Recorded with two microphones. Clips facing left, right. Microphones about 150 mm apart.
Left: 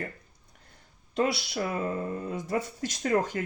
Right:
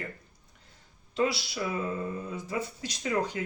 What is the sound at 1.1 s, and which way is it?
Speech, 50° left (ahead or behind).